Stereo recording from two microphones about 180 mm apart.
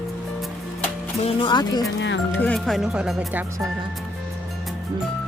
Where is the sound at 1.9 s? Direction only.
80° left.